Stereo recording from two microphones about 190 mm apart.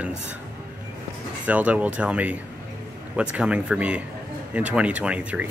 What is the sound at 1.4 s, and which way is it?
Speech, 5° right (ahead or behind).